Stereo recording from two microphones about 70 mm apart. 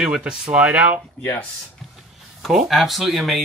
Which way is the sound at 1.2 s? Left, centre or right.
Left.